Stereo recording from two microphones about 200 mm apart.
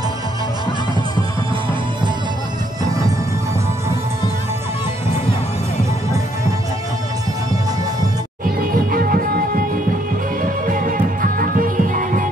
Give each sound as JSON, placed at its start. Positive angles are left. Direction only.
{"t": 8.5, "sound": "music", "side_deg": -45}
{"t": 10.4, "sound": "music", "side_deg": -45}